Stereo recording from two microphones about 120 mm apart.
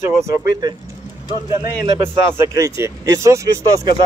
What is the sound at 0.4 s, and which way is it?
Speech, 35° right (ahead or behind).